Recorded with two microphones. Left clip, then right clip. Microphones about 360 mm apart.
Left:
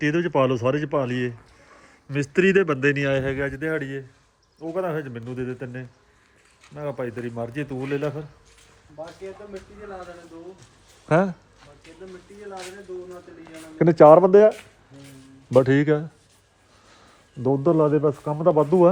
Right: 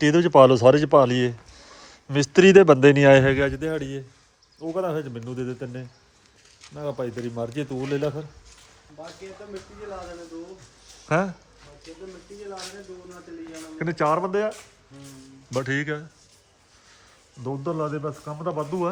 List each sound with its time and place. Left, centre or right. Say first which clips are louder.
0.0 s a man's voice: right 6 dB; centre
3.6 s a man's voice: left 1 dB; centre
11.1 s speech: left 3 dB; centre
13.7 s speech: left 11 dB; centre
17.4 s speech: left 9 dB; centre